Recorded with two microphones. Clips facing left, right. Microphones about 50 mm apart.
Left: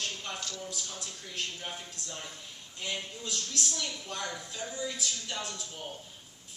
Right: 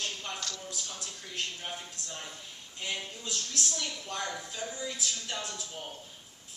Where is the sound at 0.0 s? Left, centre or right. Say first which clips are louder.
Even; centre.